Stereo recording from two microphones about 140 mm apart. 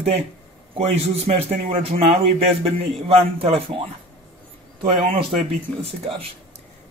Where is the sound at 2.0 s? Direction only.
45° right (ahead or behind).